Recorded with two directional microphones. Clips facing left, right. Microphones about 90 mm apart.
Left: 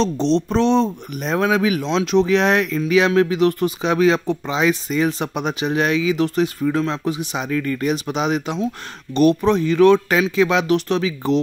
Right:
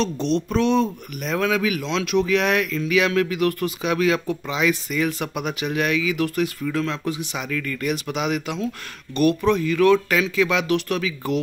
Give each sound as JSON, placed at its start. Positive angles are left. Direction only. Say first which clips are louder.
{"t": 0.0, "sound": "speech", "louder": "left 4 dB", "side_deg": 30}